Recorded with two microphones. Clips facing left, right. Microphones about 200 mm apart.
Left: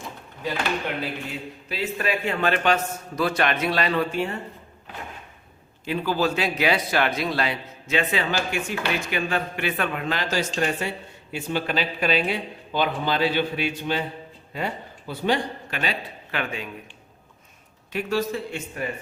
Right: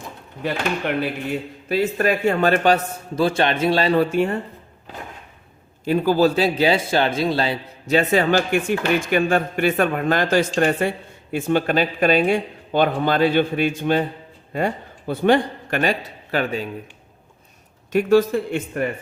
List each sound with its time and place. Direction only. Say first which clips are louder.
0.4 s speech: right 4 dB; 55° right (ahead or behind)
5.8 s a man's voice: right 7 dB; 40° right (ahead or behind)
17.9 s a man's voice: right 9 dB; 50° right (ahead or behind)